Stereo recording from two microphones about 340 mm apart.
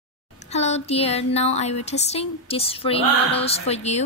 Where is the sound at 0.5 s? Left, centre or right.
Centre.